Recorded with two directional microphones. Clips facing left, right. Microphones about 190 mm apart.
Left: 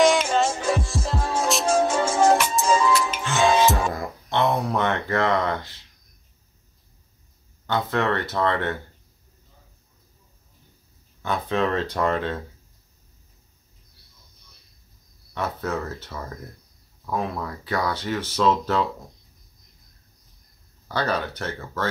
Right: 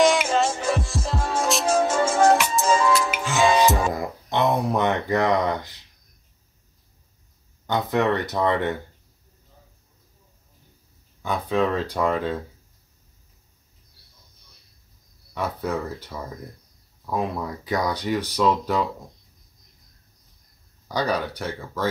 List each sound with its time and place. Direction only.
0.0 s music: centre (ahead or behind)
3.9 s speech: 20° right (ahead or behind)
7.6 s speech: 15° right (ahead or behind)
11.2 s speech: 10° right (ahead or behind)
15.3 s speech: 10° right (ahead or behind)
20.9 s speech: 10° right (ahead or behind)